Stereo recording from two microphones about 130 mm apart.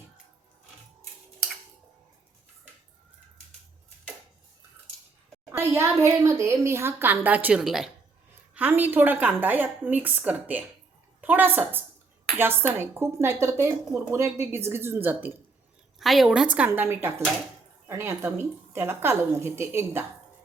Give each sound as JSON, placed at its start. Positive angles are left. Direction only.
{"t": 5.5, "sound": "speech", "side_deg": -15}
{"t": 8.5, "sound": "speech", "side_deg": -15}
{"t": 16.0, "sound": "speech", "side_deg": 0}